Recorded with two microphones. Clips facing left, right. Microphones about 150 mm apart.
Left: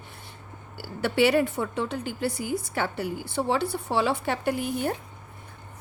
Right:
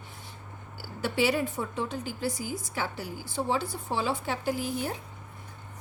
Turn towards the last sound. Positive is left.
turn(degrees=60)  # may be behind; listen again after turning